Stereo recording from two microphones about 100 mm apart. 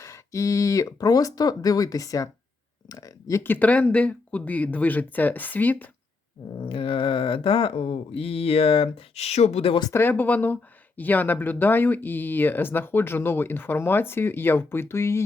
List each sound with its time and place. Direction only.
0.0 s speech: 30° left (ahead or behind)
3.4 s speech: 20° left (ahead or behind)
6.6 s speech: 65° left (ahead or behind); by 9.7 s 90° left
9.9 s speech: 20° left (ahead or behind)